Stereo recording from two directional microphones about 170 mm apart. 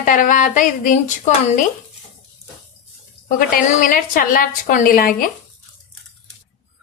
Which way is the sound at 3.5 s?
55° left (ahead or behind).